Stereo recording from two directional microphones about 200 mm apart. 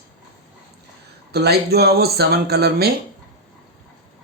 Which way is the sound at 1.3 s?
55° right (ahead or behind).